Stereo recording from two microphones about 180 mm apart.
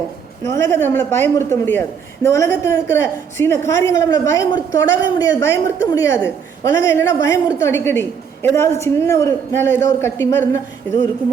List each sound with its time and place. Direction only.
0.4 s a woman's voice: 15° left (ahead or behind)